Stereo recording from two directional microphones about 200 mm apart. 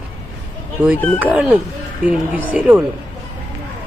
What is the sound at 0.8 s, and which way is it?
Speech, 10° right (ahead or behind).